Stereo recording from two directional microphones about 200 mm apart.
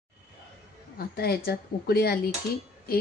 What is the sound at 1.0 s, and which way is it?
Speech, 50° left (ahead or behind).